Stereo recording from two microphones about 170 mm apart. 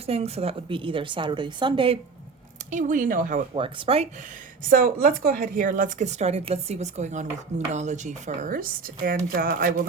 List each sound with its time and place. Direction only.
0.0 s a woman's voice: 35° right (ahead or behind)
2.6 s speech: 50° right (ahead or behind)
3.5 s a woman's voice: 35° right (ahead or behind)
4.7 s speech: 55° right (ahead or behind)